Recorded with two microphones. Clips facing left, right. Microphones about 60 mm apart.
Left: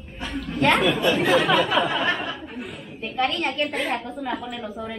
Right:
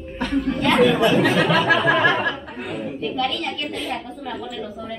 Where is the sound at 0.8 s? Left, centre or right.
Right.